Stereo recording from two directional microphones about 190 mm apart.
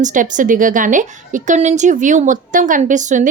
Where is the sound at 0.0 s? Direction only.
45° right (ahead or behind).